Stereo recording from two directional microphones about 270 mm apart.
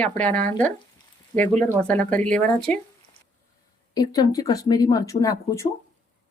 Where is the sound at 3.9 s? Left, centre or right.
Centre.